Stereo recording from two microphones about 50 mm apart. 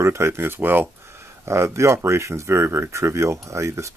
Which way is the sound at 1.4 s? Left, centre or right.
Right.